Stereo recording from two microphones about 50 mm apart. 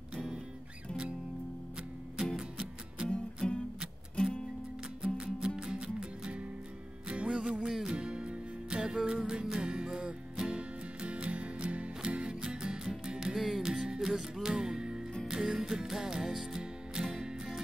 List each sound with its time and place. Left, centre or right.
2.3 s music: centre
3.4 s music: centre
5.1 s music: centre
10.5 s music: right